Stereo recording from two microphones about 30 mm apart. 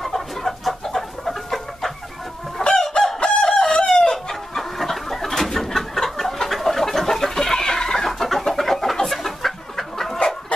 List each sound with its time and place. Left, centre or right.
0.0 s chicken: centre
2.6 s chicken: left
7.3 s chicken: centre
8.1 s chicken: centre